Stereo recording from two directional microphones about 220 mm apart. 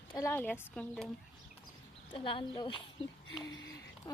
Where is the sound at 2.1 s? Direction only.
20° left (ahead or behind).